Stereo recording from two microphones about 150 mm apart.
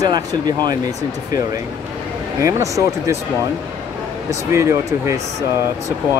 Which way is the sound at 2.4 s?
20° right (ahead or behind).